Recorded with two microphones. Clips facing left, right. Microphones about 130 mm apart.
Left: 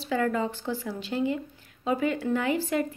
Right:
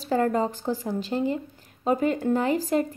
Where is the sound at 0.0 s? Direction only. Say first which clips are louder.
Right 3 dB; 40° right (ahead or behind).